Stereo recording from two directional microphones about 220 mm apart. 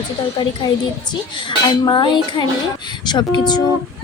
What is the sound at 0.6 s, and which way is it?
A woman's voice, 15° left (ahead or behind).